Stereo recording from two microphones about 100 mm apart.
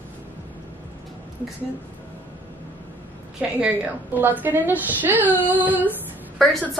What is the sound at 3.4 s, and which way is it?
Speech, 10° right (ahead or behind).